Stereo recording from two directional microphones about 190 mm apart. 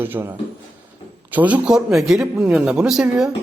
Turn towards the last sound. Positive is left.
turn(degrees=-5)  # may be behind; listen again after turning